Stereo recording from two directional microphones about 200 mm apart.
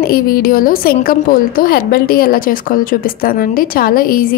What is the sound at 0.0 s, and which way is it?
A woman's voice, 50° left (ahead or behind).